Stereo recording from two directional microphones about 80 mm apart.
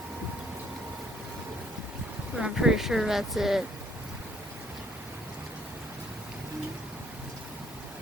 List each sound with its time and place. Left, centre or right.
2.4 s speech: centre